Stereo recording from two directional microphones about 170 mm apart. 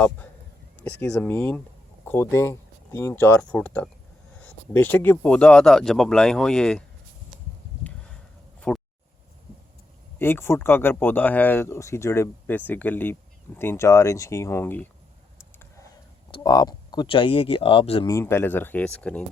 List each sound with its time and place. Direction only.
1.1 s speech: 10° left (ahead or behind)
8.7 s a sound: 5° left (ahead or behind)
10.2 s speech: 15° left (ahead or behind)
16.3 s speech: 25° left (ahead or behind)
18.1 s speech: 15° left (ahead or behind)